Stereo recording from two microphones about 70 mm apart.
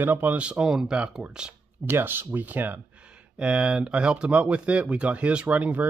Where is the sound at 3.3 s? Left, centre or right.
Centre.